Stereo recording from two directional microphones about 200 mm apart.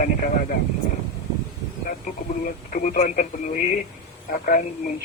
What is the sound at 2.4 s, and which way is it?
Speech, 40° left (ahead or behind).